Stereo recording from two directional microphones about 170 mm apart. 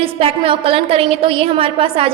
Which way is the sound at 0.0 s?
35° right (ahead or behind).